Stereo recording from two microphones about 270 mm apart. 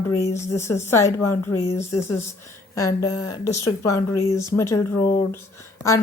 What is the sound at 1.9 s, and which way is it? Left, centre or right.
Speech, left.